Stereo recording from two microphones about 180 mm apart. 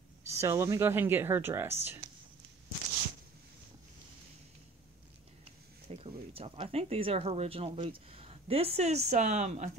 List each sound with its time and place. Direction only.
0.3 s speech: 15° right (ahead or behind)
5.9 s speech: 30° right (ahead or behind)